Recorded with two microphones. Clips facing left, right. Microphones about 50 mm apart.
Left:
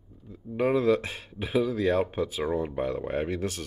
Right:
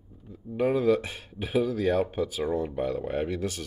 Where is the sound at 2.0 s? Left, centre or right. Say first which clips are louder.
Even; centre.